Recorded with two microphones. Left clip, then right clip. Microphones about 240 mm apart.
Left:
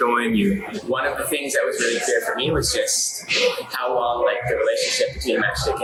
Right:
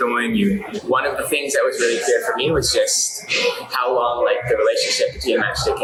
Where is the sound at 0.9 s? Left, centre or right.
Right.